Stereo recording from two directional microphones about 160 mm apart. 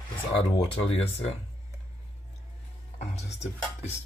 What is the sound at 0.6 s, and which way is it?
Speech, 35° left (ahead or behind).